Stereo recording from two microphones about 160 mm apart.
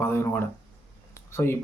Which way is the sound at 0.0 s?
15° left (ahead or behind).